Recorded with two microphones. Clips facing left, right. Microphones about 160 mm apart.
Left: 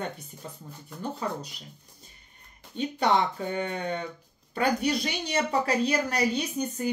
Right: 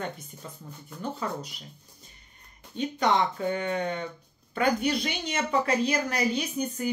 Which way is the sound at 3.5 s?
30° left (ahead or behind).